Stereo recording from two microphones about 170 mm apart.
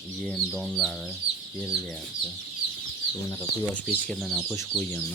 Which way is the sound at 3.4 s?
10° left (ahead or behind).